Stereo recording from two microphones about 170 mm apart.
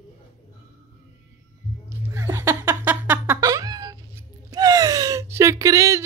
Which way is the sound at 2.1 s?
15° right (ahead or behind).